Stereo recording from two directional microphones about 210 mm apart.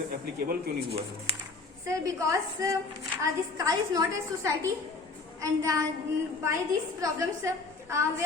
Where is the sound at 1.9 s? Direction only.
15° right (ahead or behind).